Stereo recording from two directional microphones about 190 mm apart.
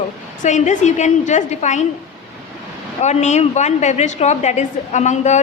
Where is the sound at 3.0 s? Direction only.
35° left (ahead or behind).